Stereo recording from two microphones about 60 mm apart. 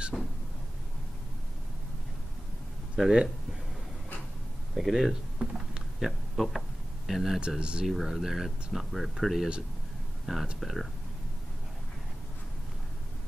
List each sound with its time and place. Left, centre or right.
0.1 s a sound: centre
4.7 s speech: centre
7.3 s speech: centre
7.8 s speech: centre